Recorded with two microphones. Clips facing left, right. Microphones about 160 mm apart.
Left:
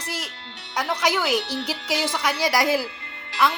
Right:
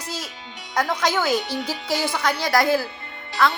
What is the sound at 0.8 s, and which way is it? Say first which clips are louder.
Speech: right 2 dB; 10° left (ahead or behind).